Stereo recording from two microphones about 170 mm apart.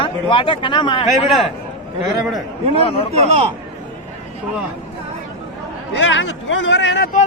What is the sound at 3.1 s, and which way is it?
Speech, 35° right (ahead or behind).